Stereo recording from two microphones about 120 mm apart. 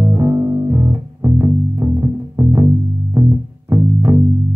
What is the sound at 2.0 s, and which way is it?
Music, 25° right (ahead or behind).